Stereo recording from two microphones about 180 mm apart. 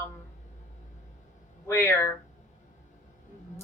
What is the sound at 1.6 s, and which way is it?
Speech, 15° left (ahead or behind).